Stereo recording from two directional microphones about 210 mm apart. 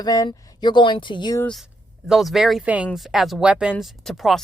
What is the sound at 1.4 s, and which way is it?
Speech, centre (ahead or behind).